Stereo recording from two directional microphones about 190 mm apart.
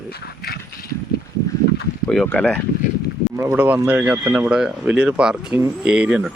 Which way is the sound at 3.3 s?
10° right (ahead or behind).